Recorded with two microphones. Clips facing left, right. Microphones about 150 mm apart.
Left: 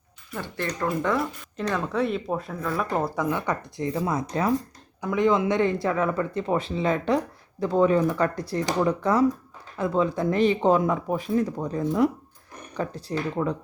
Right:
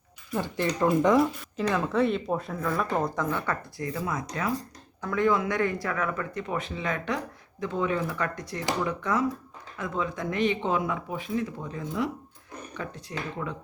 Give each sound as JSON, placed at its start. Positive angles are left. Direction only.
{"t": 0.3, "sound": "speech", "side_deg": -20}
{"t": 1.2, "sound": "speech", "side_deg": 0}
{"t": 4.9, "sound": "speech", "side_deg": 15}